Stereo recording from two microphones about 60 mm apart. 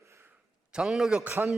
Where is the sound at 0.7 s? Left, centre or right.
Centre.